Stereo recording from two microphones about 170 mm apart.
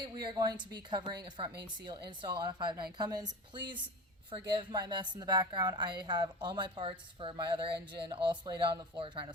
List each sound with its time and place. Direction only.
0.0 s a woman's voice: 25° right (ahead or behind)